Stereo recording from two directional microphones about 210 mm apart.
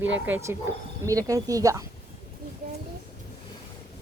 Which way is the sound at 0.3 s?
10° right (ahead or behind).